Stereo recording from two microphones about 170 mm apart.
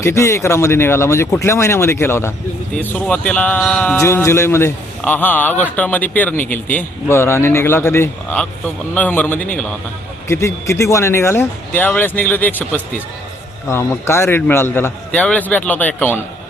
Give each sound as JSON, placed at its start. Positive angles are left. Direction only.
{"t": 0.0, "sound": "speech", "side_deg": 15}